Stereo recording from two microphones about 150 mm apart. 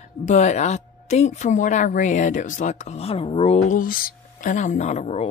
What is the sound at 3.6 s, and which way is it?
Speech, 65° left (ahead or behind).